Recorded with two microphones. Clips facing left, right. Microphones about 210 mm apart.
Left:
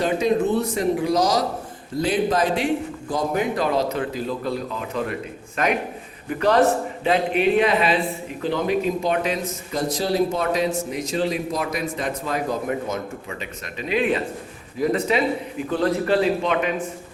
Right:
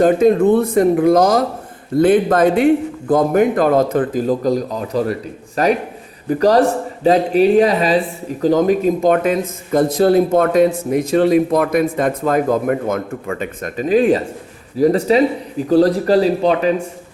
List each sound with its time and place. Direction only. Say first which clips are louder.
0.0 s speech: right 9 dB; 50° right (ahead or behind); by 16.7 s 35° right (ahead or behind)